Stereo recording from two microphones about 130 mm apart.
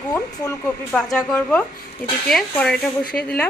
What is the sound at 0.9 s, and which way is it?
A woman's voice, 5° left (ahead or behind).